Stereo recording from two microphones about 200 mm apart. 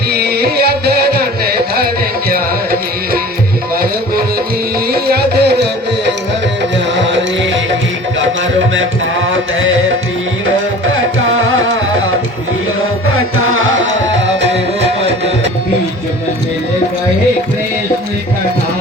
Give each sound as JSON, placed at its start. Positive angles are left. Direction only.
{"t": 0.1, "sound": "music", "side_deg": -55}
{"t": 4.9, "sound": "music", "side_deg": -50}
{"t": 7.0, "sound": "music", "side_deg": -65}
{"t": 13.5, "sound": "music", "side_deg": -80}